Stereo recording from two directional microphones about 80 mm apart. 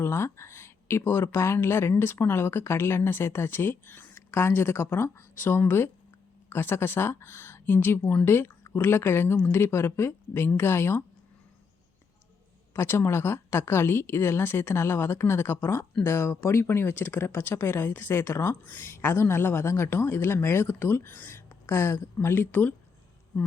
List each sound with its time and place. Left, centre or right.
0.0 s speech: left
12.7 s speech: left